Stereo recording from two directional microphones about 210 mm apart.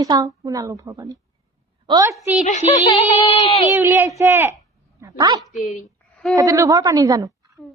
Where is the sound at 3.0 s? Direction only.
25° left (ahead or behind).